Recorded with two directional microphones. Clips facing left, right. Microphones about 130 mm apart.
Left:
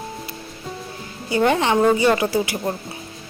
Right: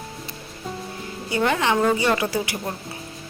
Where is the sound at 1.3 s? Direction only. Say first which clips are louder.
Left 3 dB; 30° left (ahead or behind).